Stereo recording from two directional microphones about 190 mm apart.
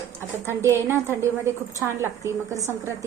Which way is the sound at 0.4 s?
15° right (ahead or behind).